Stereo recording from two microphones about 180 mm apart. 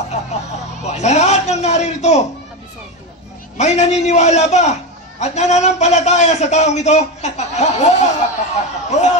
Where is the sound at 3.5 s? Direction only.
40° left (ahead or behind).